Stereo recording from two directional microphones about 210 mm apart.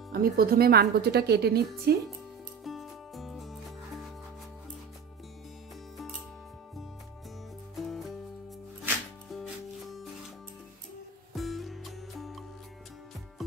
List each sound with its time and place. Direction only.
0.1 s a woman's voice: 45° right (ahead or behind)
2.6 s music: centre (ahead or behind)
8.8 s music: centre (ahead or behind)
11.3 s music: centre (ahead or behind)